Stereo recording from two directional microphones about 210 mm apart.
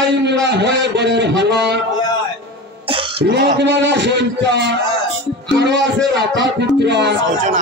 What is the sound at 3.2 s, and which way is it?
A man's voice, 55° right (ahead or behind).